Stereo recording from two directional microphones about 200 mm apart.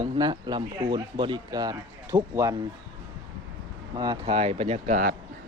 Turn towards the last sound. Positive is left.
turn(degrees=-45)  # may be behind; listen again after turning